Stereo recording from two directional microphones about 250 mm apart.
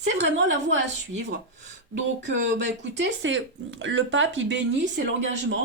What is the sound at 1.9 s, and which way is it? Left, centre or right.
Speech, right.